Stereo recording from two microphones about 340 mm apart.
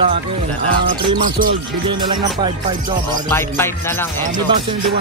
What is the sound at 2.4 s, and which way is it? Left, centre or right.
Speech, centre.